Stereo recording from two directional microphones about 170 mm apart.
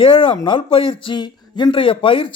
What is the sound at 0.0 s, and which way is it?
Speech, 30° left (ahead or behind).